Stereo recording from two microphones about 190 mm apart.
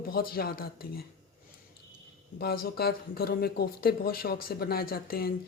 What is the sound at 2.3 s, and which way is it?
Speech, 55° left (ahead or behind).